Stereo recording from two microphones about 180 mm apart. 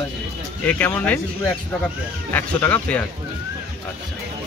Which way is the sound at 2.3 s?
10° left (ahead or behind).